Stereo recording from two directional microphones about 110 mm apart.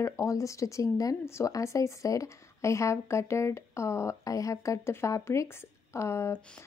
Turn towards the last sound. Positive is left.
turn(degrees=25)  # may be behind; listen again after turning